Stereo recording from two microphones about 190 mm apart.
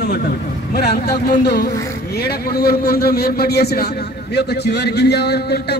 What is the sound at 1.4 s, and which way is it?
A man's voice, 60° left (ahead or behind).